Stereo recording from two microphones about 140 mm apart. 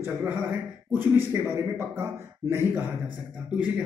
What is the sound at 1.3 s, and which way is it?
Speech, 20° right (ahead or behind).